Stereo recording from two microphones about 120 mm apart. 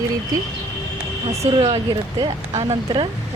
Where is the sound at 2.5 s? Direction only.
35° right (ahead or behind).